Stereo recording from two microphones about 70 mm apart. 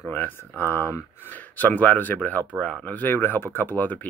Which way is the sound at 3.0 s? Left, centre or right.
Left.